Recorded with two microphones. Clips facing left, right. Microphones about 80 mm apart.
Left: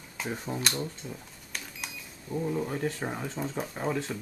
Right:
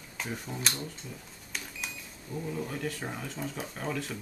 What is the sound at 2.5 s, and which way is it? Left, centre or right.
Speech, left.